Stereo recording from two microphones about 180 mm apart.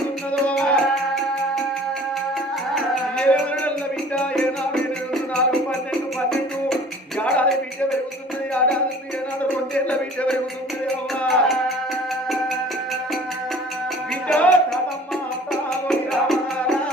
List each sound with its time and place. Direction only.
0.4 s music: 5° left (ahead or behind)
2.7 s music: 5° left (ahead or behind)
7.2 s music: 5° left (ahead or behind)
9.4 s a sound: 5° left (ahead or behind)
10.8 s music: 5° left (ahead or behind)
14.3 s music: 5° left (ahead or behind)
15.9 s music: centre (ahead or behind)